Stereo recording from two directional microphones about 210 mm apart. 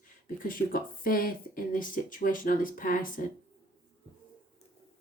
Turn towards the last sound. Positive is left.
turn(degrees=40)  # may be behind; listen again after turning